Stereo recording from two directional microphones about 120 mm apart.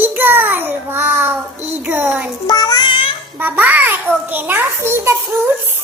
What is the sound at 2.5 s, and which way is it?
Child singing, 35° left (ahead or behind).